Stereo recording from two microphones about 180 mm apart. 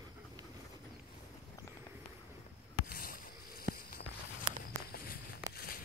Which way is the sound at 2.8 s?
55° left (ahead or behind).